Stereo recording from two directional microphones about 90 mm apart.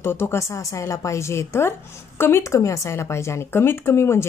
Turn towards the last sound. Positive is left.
turn(degrees=30)  # may be behind; listen again after turning